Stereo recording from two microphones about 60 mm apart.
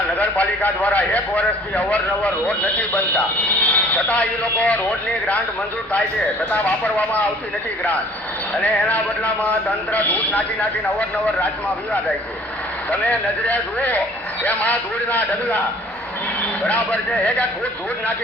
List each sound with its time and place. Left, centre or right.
0.2 s a man's voice: left
6.5 s a man's voice: left
8.6 s a man's voice: left
12.9 s a man's voice: left
16.6 s a man's voice: left